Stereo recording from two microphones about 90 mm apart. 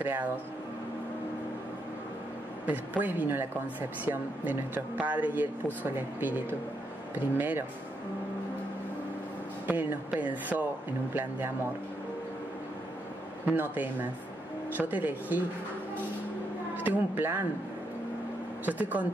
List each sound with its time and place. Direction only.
0.0 s speech: 20° right (ahead or behind)
3.0 s speech: 20° right (ahead or behind)
9.7 s speech: 20° right (ahead or behind)
13.5 s speech: 20° right (ahead or behind)
16.7 s speech: 20° right (ahead or behind)
18.7 s speech: 15° right (ahead or behind)